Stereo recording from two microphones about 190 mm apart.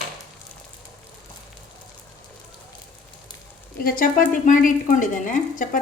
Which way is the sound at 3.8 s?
50° left (ahead or behind).